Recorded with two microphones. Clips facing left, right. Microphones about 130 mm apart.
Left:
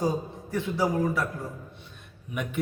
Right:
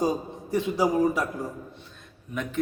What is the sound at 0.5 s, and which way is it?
Speech, 20° right (ahead or behind).